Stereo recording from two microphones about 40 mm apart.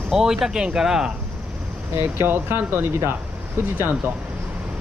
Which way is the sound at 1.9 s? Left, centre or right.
Right.